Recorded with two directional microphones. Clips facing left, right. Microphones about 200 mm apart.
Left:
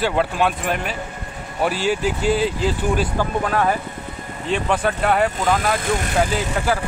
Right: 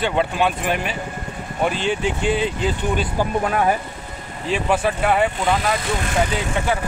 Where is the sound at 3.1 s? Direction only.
15° right (ahead or behind).